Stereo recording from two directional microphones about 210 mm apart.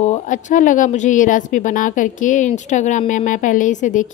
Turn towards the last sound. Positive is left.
turn(degrees=35)  # may be behind; listen again after turning